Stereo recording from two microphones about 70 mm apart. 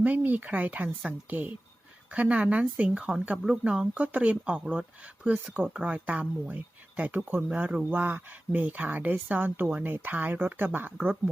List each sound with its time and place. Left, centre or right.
0.0 s speech: right